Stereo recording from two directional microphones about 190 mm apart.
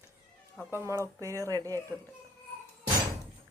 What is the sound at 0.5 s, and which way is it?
Speech, 10° right (ahead or behind).